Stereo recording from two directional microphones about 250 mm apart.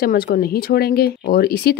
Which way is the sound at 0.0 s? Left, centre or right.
Left.